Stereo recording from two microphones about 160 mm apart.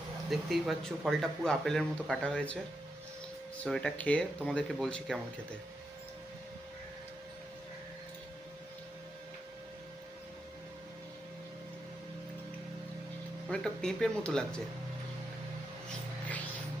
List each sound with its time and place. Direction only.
0.3 s speech: centre (ahead or behind)
3.6 s speech: 5° left (ahead or behind)
13.5 s speech: 5° left (ahead or behind)